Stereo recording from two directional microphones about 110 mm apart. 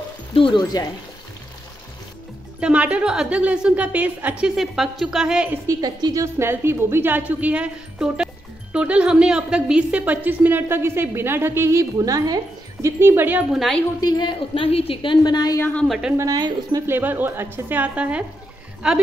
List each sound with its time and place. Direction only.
0.3 s a woman's voice: 50° left (ahead or behind)
2.6 s speech: 10° right (ahead or behind)
4.6 s speech: 5° right (ahead or behind)
5.7 s speech: 35° right (ahead or behind)
6.2 s a woman's voice: 25° right (ahead or behind)
12.8 s a woman's voice: 20° right (ahead or behind)
13.5 s speech: centre (ahead or behind)
14.0 s a woman's voice: 40° left (ahead or behind)
15.6 s speech: 10° left (ahead or behind)
15.9 s speech: 5° right (ahead or behind)
16.2 s speech: 35° right (ahead or behind)
16.8 s speech: 20° right (ahead or behind)